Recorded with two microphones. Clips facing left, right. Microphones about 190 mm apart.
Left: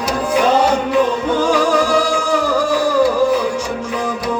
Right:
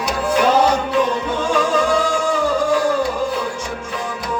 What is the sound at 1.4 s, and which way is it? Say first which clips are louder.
Music: left 3 dB; 80° left.